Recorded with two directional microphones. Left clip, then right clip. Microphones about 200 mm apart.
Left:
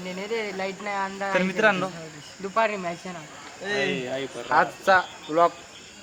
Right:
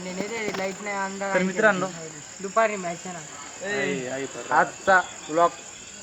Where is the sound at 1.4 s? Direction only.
5° left (ahead or behind).